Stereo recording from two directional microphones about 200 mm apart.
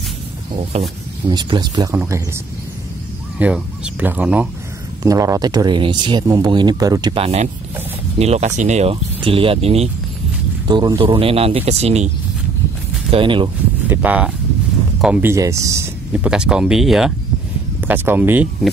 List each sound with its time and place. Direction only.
0.7 s speech: 30° right (ahead or behind)
1.3 s speech: 20° right (ahead or behind)
3.3 s speech: 5° right (ahead or behind)
8.2 s speech: 35° right (ahead or behind)
13.1 s speech: 25° right (ahead or behind)
13.8 s speech: 5° right (ahead or behind)